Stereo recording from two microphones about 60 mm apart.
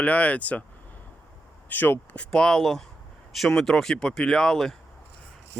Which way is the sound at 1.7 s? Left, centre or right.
Left.